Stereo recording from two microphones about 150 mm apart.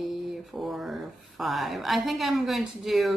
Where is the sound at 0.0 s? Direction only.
Centre (ahead or behind).